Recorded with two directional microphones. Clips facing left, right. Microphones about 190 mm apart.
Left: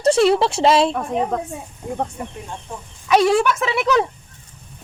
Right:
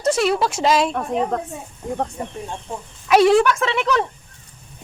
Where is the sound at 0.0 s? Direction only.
30° left (ahead or behind).